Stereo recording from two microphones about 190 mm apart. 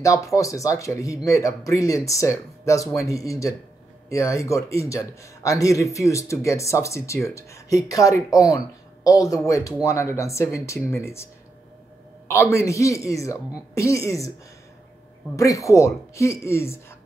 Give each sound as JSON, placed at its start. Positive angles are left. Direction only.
{"t": 0.0, "sound": "a man's voice", "side_deg": 15}
{"t": 12.3, "sound": "a man's voice", "side_deg": 15}
{"t": 15.3, "sound": "a man's voice", "side_deg": 15}